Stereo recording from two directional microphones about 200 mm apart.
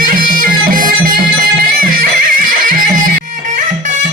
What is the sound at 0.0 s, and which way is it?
Music, 45° right (ahead or behind).